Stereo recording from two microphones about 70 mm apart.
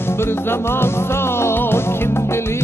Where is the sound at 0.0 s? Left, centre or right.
Left.